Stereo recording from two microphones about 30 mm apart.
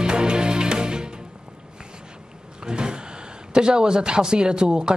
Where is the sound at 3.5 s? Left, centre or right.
Right.